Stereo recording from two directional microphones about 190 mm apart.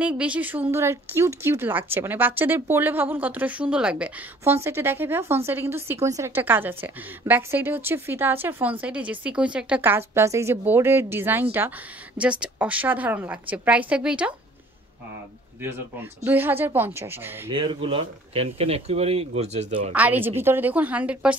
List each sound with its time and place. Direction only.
0.0 s speech: 5° right (ahead or behind)
16.3 s speech: 10° right (ahead or behind)
17.5 s speech: 25° right (ahead or behind)
19.9 s speech: 10° right (ahead or behind)